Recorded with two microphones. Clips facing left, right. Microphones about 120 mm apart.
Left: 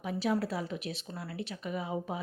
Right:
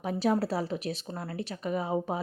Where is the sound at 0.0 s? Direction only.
40° right (ahead or behind).